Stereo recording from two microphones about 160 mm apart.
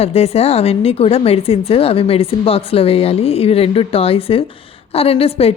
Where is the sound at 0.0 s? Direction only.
40° left (ahead or behind).